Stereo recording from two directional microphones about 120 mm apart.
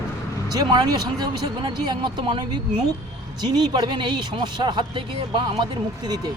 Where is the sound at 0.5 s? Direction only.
35° right (ahead or behind).